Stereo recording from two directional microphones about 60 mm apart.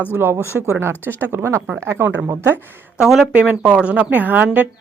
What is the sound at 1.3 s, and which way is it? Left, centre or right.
Speech, right.